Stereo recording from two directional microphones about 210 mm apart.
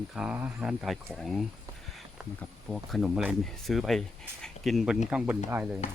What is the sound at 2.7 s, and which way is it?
Speech, centre (ahead or behind).